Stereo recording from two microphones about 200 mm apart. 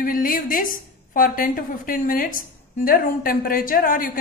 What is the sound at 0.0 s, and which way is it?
A woman's voice, 45° left (ahead or behind).